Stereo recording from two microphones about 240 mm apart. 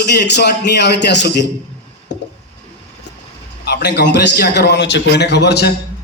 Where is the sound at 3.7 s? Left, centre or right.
Left.